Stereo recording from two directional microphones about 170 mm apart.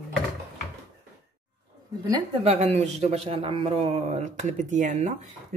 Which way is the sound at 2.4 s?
40° right (ahead or behind).